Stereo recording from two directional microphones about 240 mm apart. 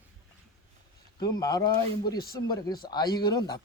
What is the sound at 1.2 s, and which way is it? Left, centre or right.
Speech, centre.